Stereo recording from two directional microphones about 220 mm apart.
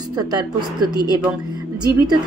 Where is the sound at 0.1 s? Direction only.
20° right (ahead or behind).